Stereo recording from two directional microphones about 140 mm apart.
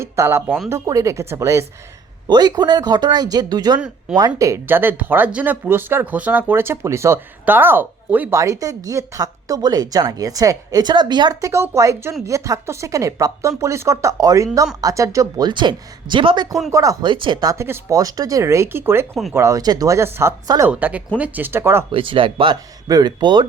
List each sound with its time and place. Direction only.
0.0 s speech: 20° right (ahead or behind)
21.9 s speech: 40° right (ahead or behind)